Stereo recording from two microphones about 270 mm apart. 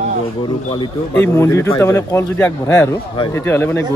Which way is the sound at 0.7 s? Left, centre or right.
Centre.